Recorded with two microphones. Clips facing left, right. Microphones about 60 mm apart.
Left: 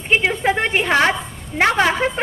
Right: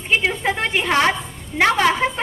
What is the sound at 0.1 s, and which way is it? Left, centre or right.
A woman's voice, left.